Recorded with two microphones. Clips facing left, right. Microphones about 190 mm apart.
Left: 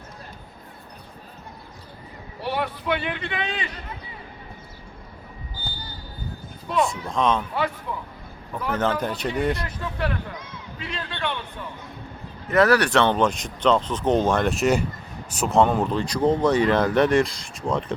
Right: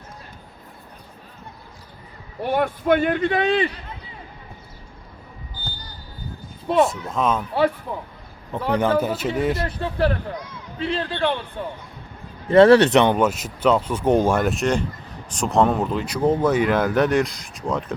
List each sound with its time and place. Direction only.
2.4 s a man's voice: 50° right (ahead or behind)
6.8 s speech: 5° right (ahead or behind)
7.5 s speech: 35° right (ahead or behind)
8.7 s speech: 10° right (ahead or behind)
9.6 s speech: 30° right (ahead or behind); by 17.9 s centre (ahead or behind)